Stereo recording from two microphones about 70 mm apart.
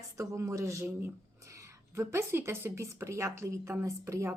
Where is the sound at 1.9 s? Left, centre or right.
Right.